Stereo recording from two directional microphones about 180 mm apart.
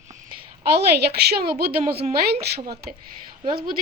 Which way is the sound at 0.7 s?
65° right (ahead or behind).